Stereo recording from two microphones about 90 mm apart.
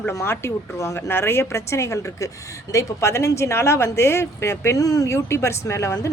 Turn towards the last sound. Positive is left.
turn(degrees=30)  # may be behind; listen again after turning